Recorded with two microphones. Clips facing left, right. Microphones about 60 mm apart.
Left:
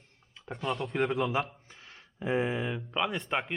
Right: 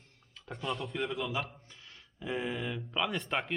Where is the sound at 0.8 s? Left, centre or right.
Left.